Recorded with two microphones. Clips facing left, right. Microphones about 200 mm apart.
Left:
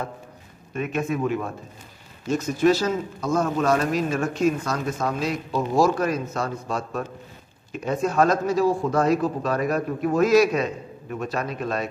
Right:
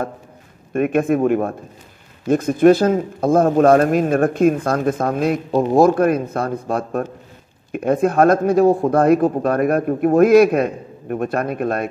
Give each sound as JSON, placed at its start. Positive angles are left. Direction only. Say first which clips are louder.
{"t": 0.7, "sound": "speech", "louder": "right 9 dB", "side_deg": -55}